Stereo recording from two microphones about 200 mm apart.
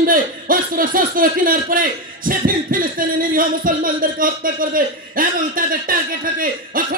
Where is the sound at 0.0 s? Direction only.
45° right (ahead or behind).